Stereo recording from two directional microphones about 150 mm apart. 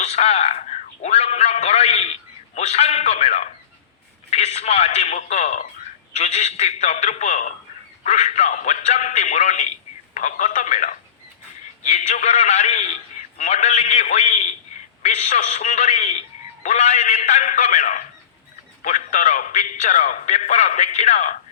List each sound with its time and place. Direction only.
0.0 s speech: 45° left (ahead or behind)